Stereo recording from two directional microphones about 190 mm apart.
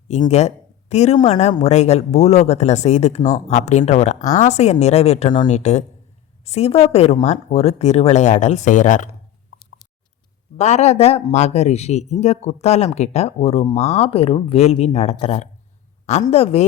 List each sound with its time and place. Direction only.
0.3 s speech: 35° left (ahead or behind)
10.6 s speech: 35° left (ahead or behind)